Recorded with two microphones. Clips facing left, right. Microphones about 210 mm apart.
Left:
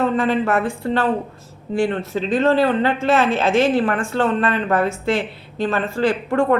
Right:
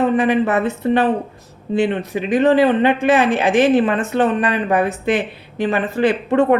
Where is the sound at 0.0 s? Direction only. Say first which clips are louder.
Right 3 dB; 15° right (ahead or behind).